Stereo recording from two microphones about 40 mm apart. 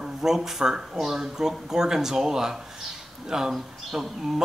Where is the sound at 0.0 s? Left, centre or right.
Centre.